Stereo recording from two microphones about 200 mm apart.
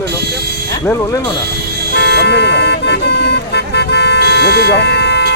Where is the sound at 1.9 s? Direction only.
55° left (ahead or behind).